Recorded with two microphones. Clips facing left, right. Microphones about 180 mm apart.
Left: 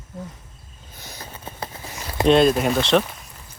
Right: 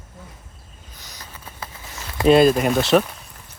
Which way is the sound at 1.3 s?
30° left (ahead or behind).